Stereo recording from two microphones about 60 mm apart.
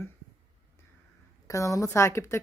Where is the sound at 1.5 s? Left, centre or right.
Left.